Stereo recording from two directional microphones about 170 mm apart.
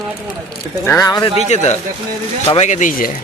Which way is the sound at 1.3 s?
40° left (ahead or behind).